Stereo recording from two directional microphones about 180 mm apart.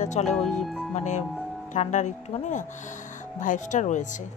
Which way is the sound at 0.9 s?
40° left (ahead or behind).